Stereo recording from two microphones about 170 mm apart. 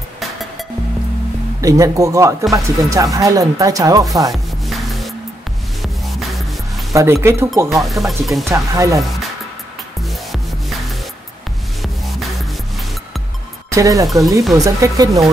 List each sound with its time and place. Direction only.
1.6 s speech: 20° right (ahead or behind)
4.3 s music: centre (ahead or behind)
6.9 s speech: 20° right (ahead or behind)
8.1 s music: centre (ahead or behind)
8.5 s speech: 20° right (ahead or behind)
11.8 s music: centre (ahead or behind)
13.7 s speech: 20° right (ahead or behind)
14.0 s music: centre (ahead or behind)
14.5 s speech: 20° right (ahead or behind)